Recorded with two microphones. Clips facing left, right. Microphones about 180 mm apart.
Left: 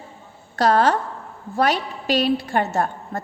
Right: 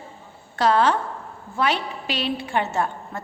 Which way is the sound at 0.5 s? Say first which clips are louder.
Left 2 dB; 40° left (ahead or behind).